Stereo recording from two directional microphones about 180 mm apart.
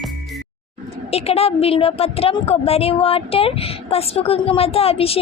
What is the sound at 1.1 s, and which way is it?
A woman's voice, 35° left (ahead or behind).